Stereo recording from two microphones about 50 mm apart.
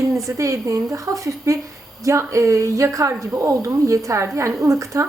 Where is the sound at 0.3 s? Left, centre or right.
Right.